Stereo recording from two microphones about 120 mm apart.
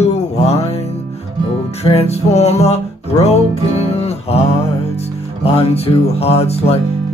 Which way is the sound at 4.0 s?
60° left (ahead or behind).